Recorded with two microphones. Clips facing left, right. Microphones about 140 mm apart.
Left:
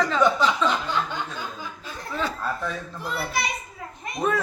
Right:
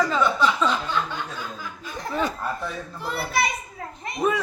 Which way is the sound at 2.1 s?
15° right (ahead or behind).